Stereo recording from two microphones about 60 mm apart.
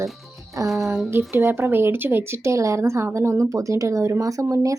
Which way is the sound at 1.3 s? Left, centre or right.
Right.